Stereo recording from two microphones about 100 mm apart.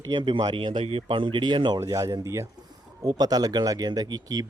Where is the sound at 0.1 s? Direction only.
50° right (ahead or behind).